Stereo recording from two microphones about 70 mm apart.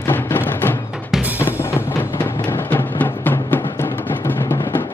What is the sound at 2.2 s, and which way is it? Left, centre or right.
Music, left.